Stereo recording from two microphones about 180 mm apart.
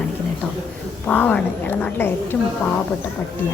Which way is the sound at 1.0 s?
10° left (ahead or behind).